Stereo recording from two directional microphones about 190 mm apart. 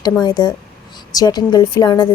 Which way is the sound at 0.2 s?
20° left (ahead or behind).